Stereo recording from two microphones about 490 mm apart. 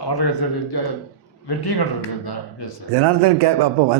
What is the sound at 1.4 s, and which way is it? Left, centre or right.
Speech, left.